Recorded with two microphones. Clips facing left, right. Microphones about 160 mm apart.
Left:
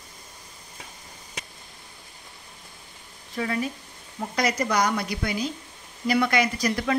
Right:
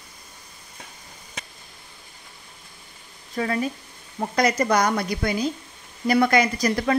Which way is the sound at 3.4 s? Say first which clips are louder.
Right 3 dB; 45° right (ahead or behind).